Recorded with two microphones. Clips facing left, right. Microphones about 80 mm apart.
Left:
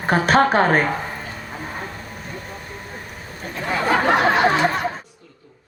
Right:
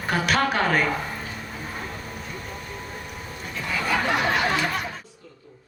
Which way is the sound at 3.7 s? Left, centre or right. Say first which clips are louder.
Left 6 dB; left.